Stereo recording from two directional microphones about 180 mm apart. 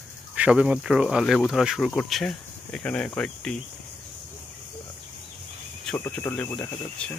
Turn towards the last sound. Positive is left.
turn(degrees=5)  # may be behind; listen again after turning